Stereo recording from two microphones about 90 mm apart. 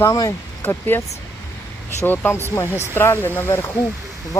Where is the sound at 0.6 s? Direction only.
25° left (ahead or behind).